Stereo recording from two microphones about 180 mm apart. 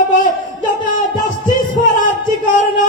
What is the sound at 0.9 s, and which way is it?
Music, 50° left (ahead or behind).